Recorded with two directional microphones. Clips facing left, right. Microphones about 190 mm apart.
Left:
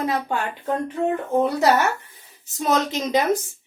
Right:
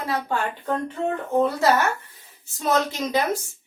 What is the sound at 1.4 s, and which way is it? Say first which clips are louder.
A woman's voice: left 1 dB; 20° left (ahead or behind).